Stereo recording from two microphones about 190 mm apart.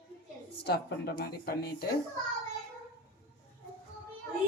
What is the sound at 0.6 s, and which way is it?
Speech, 60° left (ahead or behind).